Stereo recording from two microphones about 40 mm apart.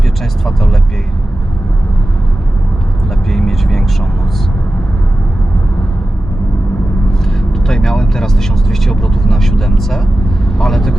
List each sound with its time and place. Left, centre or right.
0.4 s vehicle: centre
3.2 s vehicle: centre
7.3 s vehicle: centre